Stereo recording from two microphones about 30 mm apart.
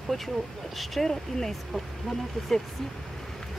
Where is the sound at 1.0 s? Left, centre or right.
Centre.